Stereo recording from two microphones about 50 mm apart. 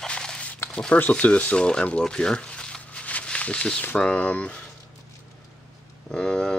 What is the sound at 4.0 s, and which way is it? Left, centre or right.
Speech, left.